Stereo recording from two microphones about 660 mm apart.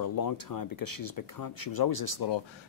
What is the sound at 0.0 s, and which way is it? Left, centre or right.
Speech, left.